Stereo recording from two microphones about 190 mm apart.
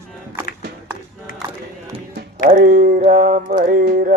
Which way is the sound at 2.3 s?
45° right (ahead or behind).